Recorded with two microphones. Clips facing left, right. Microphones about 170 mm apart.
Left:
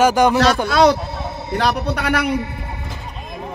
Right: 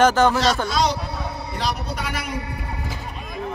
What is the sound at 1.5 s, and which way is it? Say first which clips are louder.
Speech: left 8 dB; 65° left (ahead or behind).